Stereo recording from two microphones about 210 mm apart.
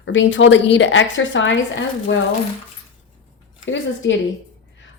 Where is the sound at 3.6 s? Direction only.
60° left (ahead or behind).